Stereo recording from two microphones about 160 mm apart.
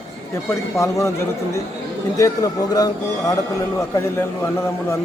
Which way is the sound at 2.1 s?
20° left (ahead or behind).